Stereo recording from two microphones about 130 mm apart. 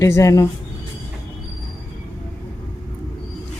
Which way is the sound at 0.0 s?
25° left (ahead or behind).